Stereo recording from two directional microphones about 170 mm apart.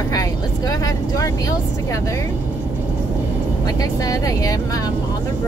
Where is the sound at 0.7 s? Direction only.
20° left (ahead or behind).